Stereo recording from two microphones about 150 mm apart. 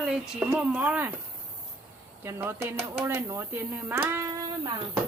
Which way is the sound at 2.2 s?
15° right (ahead or behind).